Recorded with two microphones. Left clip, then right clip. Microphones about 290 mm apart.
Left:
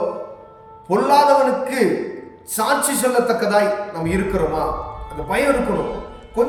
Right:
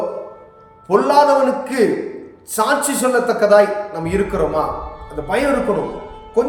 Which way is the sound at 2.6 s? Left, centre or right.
Centre.